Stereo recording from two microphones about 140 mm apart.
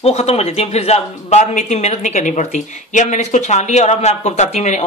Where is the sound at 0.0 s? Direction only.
50° left (ahead or behind).